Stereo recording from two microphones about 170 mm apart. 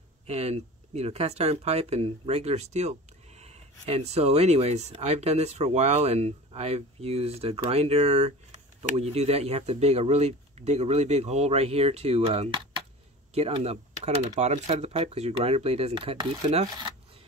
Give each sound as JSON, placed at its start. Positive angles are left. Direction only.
{"t": 0.3, "sound": "speech", "side_deg": -40}